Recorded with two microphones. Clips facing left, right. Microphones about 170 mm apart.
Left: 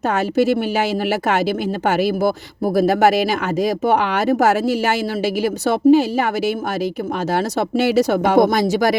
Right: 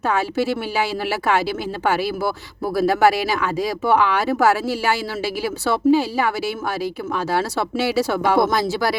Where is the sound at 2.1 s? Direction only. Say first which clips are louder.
Left 5 dB; 45° left (ahead or behind).